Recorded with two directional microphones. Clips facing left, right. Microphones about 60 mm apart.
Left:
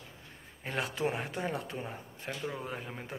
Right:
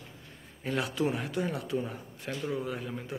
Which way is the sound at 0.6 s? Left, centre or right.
Left.